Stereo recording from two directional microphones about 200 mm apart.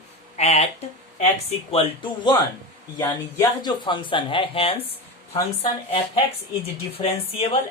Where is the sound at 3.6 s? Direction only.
25° left (ahead or behind).